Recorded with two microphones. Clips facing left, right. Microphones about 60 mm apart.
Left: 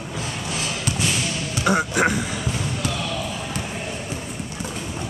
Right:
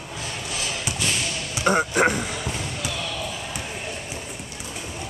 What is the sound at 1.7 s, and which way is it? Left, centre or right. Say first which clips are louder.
Speech: even; right.